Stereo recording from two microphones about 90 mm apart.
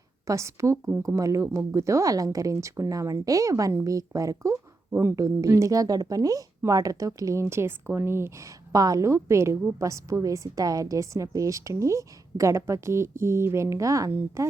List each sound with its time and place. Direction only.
0.3 s speech: 35° right (ahead or behind)